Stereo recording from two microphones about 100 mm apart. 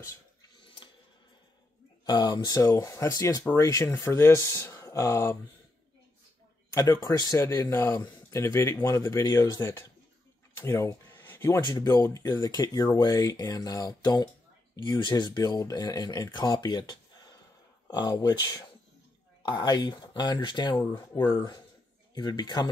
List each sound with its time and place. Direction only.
0.6 s tick-tock: 55° left (ahead or behind)
2.0 s speech: 45° left (ahead or behind); by 5.4 s 30° left (ahead or behind)
6.7 s speech: 35° left (ahead or behind)
10.5 s a sound: 30° left (ahead or behind)
11.6 s speech: 40° left (ahead or behind)